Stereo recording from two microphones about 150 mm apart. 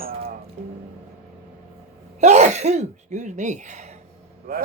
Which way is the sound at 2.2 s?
50° right (ahead or behind).